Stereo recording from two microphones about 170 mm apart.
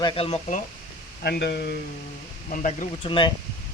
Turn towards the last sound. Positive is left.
turn(degrees=30)  # may be behind; listen again after turning